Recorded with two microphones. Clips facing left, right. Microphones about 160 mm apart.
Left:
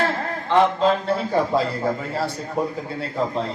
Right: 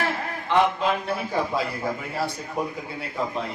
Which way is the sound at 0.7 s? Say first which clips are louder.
Left 5 dB; 15° right (ahead or behind).